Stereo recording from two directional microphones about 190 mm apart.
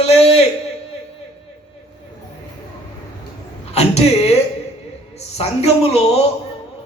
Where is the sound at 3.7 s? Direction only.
35° left (ahead or behind).